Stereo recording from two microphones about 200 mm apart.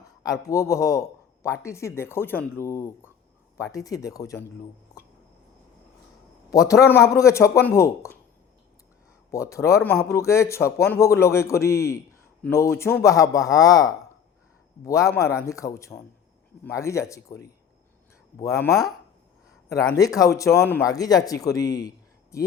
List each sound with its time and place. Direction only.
0.2 s speech: 15° left (ahead or behind)
6.5 s speech: 15° left (ahead or behind)
9.3 s speech: 15° left (ahead or behind)